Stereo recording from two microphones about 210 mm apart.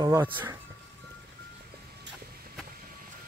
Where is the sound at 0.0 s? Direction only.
15° right (ahead or behind).